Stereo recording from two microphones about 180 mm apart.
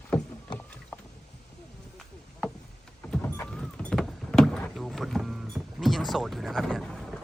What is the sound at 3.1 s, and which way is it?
Vehicle, 10° left (ahead or behind).